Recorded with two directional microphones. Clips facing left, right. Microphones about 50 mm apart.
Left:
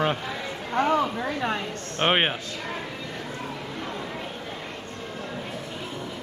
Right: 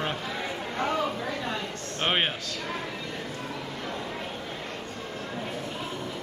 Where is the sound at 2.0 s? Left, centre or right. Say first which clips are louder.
Left 4 dB; left.